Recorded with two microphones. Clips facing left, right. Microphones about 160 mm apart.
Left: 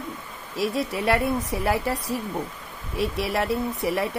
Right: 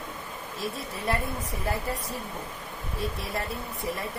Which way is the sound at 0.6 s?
85° left.